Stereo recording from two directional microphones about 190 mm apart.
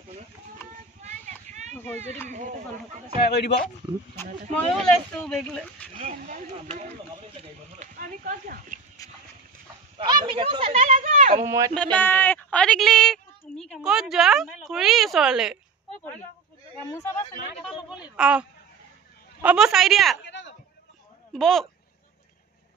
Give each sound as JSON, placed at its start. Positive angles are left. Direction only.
{"t": 1.0, "sound": "a sound", "side_deg": -40}
{"t": 1.7, "sound": "a sound", "side_deg": 10}
{"t": 3.3, "sound": "speech", "side_deg": 60}
{"t": 3.6, "sound": "speech", "side_deg": 10}
{"t": 5.9, "sound": "speech", "side_deg": -40}
{"t": 7.8, "sound": "speech", "side_deg": -45}
{"t": 9.0, "sound": "clip-clop", "side_deg": 20}
{"t": 9.9, "sound": "speech", "side_deg": -25}
{"t": 11.4, "sound": "speech", "side_deg": -15}
{"t": 11.7, "sound": "speech", "side_deg": 5}
{"t": 16.9, "sound": "speech", "side_deg": 15}
{"t": 18.0, "sound": "speech", "side_deg": -5}
{"t": 20.2, "sound": "a sound", "side_deg": 70}
{"t": 21.3, "sound": "speech", "side_deg": 0}